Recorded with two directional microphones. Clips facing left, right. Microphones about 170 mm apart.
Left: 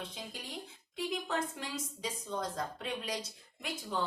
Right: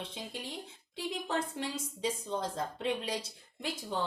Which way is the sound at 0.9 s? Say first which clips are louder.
Even; 30° right (ahead or behind).